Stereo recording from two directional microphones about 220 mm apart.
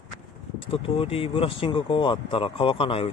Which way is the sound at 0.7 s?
25° left (ahead or behind).